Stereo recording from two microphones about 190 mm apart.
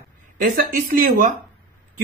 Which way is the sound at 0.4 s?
45° right (ahead or behind).